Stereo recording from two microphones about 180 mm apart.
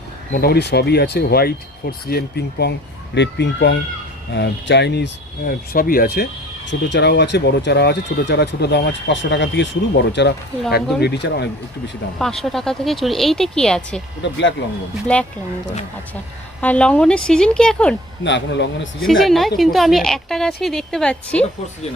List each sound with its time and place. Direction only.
0.3 s speech: 60° left (ahead or behind)
3.2 s speech: 75° left (ahead or behind); by 6.2 s 55° left (ahead or behind)
6.7 s speech: 70° left (ahead or behind)
12.2 s a woman's voice: centre (ahead or behind)
14.2 s speech: 75° left (ahead or behind)
15.0 s speech: 5° left (ahead or behind)
16.6 s a woman's voice: 5° left (ahead or behind)
18.2 s speech: 80° left
19.0 s a woman's voice: centre (ahead or behind)